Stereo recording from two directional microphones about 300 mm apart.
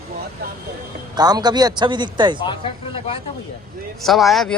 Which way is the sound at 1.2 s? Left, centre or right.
Centre.